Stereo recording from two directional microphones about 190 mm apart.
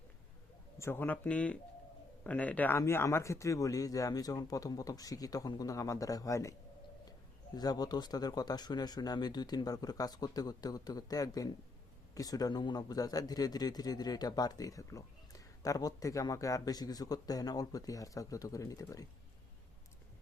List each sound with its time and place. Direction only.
0.8 s speech: 10° left (ahead or behind)
7.5 s a man's voice: 20° left (ahead or behind)